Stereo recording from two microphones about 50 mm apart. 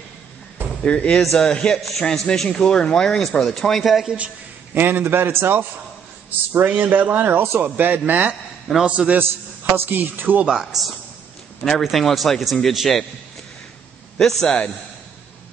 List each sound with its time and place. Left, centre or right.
0.8 s speech: centre
1.2 s speech: centre
4.7 s a man's voice: right
8.8 s a man's voice: right
9.8 s speech: right
10.5 s speech: centre
14.2 s speech: centre